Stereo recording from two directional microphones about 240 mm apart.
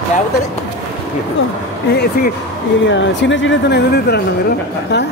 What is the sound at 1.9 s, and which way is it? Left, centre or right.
Speech, left.